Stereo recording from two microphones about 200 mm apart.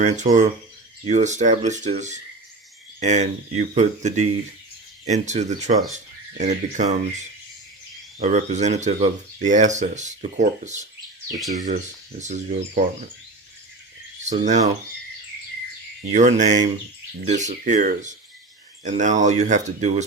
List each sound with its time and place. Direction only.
0.0 s speech: 35° right (ahead or behind)
11.3 s speech: centre (ahead or behind)
12.2 s speech: 35° right (ahead or behind)
14.3 s speech: 35° right (ahead or behind)
16.1 s speech: 35° right (ahead or behind)